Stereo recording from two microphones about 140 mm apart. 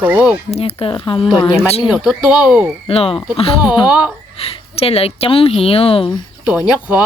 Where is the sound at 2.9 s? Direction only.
40° left (ahead or behind).